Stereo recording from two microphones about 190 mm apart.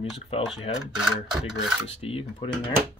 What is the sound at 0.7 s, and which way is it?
Rub, 5° right (ahead or behind).